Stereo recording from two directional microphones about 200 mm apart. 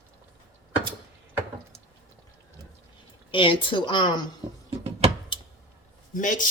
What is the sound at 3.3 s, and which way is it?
A woman's voice, 25° left (ahead or behind).